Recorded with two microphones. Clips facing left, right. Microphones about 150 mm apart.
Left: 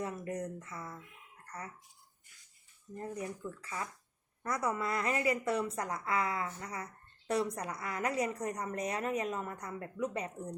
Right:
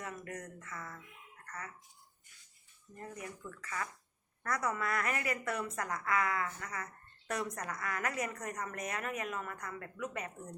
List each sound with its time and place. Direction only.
0.0 s a woman's voice: 30° left (ahead or behind)
3.0 s a woman's voice: 30° left (ahead or behind)